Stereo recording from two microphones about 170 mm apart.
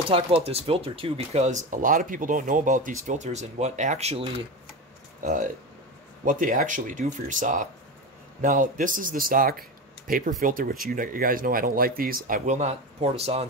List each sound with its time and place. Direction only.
0.1 s speech: 35° right (ahead or behind)
6.2 s a man's voice: 50° right (ahead or behind)
12.3 s speech: 45° right (ahead or behind)